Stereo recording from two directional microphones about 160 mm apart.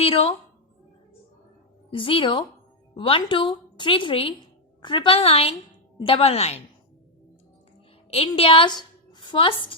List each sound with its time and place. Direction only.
0.0 s a woman's voice: 35° left (ahead or behind)
1.9 s a woman's voice: 35° left (ahead or behind)
8.4 s a woman's voice: 35° left (ahead or behind)